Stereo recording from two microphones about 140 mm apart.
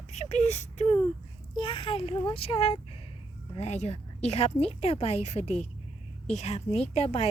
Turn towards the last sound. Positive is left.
turn(degrees=50)  # may be behind; listen again after turning